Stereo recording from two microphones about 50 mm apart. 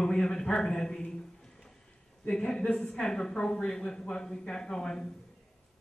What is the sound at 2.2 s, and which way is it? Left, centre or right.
A woman's voice, centre.